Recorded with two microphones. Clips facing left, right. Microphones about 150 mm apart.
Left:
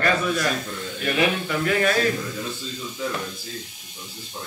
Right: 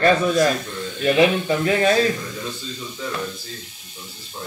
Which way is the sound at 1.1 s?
25° right (ahead or behind).